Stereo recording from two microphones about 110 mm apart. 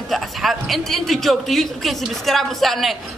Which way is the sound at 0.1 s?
Centre (ahead or behind).